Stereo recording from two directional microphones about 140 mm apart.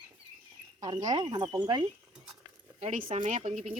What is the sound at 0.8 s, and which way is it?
Speech, 25° right (ahead or behind).